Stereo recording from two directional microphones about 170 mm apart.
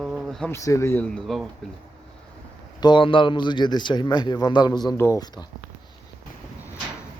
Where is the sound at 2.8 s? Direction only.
30° left (ahead or behind).